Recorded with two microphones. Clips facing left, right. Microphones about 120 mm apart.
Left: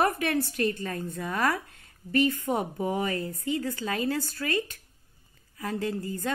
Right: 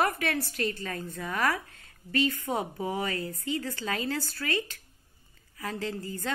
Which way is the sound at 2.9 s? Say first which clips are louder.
Left 3 dB; 20° left (ahead or behind).